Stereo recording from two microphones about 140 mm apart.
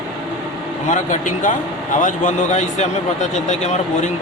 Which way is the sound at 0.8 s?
60° left (ahead or behind).